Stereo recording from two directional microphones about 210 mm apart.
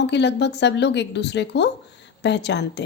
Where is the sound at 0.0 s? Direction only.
55° left (ahead or behind).